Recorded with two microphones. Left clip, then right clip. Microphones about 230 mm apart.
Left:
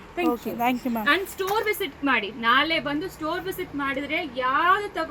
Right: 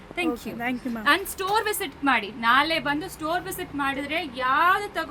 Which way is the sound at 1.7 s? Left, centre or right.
Centre.